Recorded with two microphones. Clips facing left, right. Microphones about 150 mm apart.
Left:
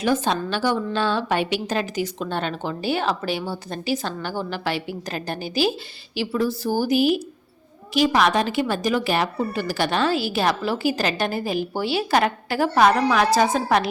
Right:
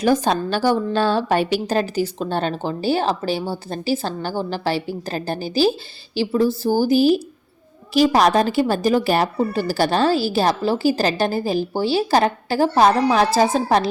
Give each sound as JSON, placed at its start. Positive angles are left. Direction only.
{"t": 0.0, "sound": "speech", "side_deg": -40}